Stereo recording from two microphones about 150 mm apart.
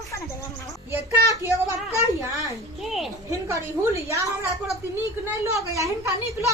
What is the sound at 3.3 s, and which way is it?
Speech, 20° right (ahead or behind).